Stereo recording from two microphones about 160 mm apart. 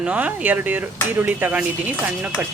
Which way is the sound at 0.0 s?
10° right (ahead or behind).